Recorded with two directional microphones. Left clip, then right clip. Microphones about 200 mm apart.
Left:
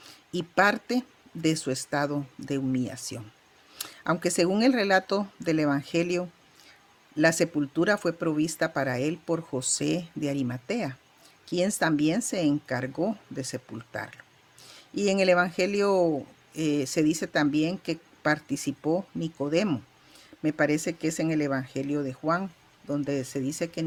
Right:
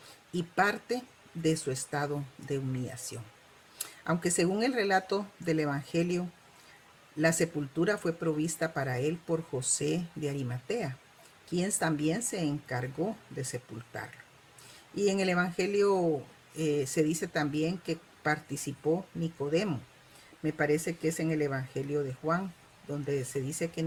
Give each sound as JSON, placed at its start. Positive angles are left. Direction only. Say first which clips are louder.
{"t": 0.3, "sound": "speech", "louder": "left 5 dB", "side_deg": 45}